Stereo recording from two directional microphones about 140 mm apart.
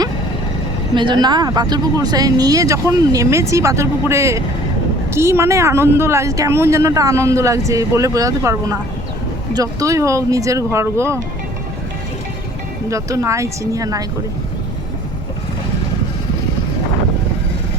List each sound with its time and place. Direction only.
0.9 s speech: 35° right (ahead or behind)
12.9 s speech: 25° right (ahead or behind)